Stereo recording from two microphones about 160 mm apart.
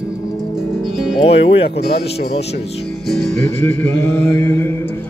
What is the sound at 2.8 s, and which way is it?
Music, centre (ahead or behind).